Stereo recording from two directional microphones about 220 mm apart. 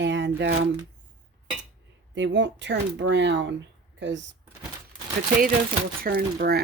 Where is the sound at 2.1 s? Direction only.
55° right (ahead or behind).